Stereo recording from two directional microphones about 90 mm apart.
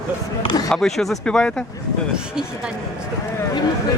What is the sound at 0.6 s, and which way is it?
Speech, 5° left (ahead or behind).